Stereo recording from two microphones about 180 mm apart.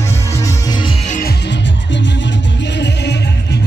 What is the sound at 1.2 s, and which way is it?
Music, 65° left (ahead or behind).